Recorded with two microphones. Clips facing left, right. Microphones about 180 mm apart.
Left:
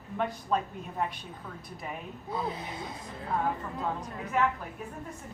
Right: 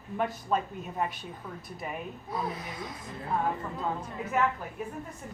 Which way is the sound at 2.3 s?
30° left (ahead or behind).